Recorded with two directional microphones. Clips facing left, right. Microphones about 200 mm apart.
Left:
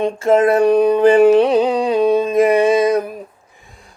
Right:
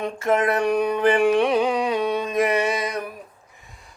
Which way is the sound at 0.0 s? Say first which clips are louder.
Left 8 dB; 30° left (ahead or behind).